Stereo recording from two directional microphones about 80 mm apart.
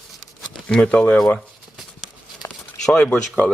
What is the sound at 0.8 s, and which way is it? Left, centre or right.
Speech, centre.